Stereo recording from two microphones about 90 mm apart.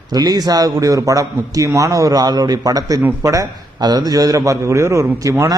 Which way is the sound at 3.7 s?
50° right (ahead or behind).